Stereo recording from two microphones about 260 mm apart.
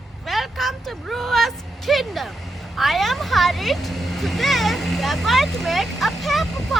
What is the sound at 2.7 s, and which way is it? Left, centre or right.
Speech, centre.